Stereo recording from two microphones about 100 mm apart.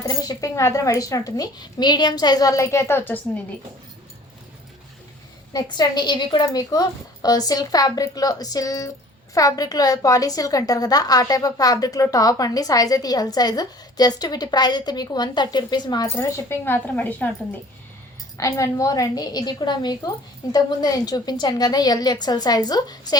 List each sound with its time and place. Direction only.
0.0 s a woman's voice: 40° left (ahead or behind); by 3.2 s 20° left (ahead or behind)
5.5 s a woman's voice: 45° left (ahead or behind)
16.0 s speech: 25° left (ahead or behind)
18.3 s a woman's voice: 30° left (ahead or behind)